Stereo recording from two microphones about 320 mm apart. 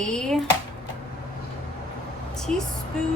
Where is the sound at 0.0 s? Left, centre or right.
Centre.